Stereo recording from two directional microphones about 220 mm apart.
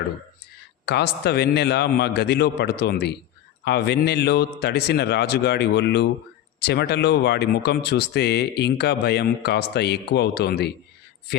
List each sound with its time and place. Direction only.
0.9 s speech: 50° left (ahead or behind)